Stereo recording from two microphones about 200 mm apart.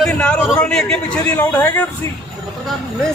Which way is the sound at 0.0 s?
5° left (ahead or behind).